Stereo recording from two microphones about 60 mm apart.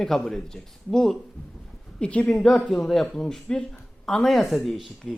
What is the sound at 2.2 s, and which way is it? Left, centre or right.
A man's voice, centre.